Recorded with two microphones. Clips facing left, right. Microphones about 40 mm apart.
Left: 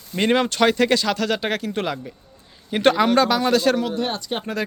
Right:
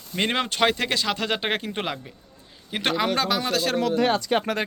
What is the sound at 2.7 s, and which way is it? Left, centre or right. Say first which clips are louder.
A man's voice: left 7 dB; centre.